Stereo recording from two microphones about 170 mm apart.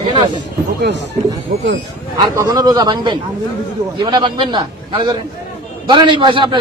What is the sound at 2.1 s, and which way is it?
A man's voice, 25° right (ahead or behind).